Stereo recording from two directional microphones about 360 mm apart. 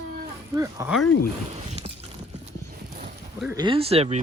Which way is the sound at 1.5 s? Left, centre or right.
Centre.